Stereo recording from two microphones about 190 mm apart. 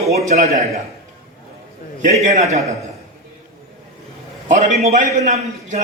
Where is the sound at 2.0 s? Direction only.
35° right (ahead or behind).